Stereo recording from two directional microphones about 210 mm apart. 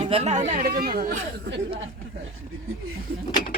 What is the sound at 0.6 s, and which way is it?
Speech, 45° right (ahead or behind).